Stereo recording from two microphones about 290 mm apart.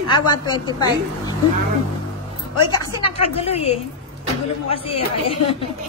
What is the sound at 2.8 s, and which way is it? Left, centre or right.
A woman's voice, centre.